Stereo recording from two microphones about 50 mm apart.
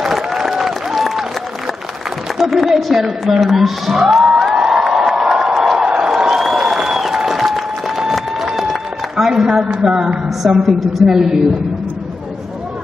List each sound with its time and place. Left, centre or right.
0.0 s applause: centre
2.3 s speech: centre
4.4 s crowd: centre
5.9 s crowd: centre
6.1 s applause: centre
9.8 s a woman's voice: centre